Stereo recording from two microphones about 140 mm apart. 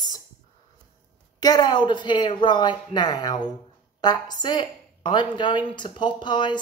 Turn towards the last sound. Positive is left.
turn(degrees=35)  # may be behind; listen again after turning